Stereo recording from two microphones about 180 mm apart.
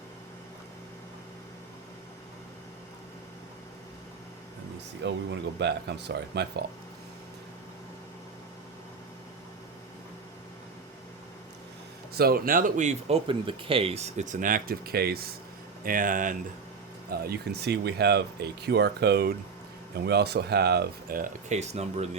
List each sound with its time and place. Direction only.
5.0 s speech: 75° right (ahead or behind)
12.1 s speech: 55° right (ahead or behind)
17.1 s speech: 60° right (ahead or behind)
21.5 s speech: 40° right (ahead or behind)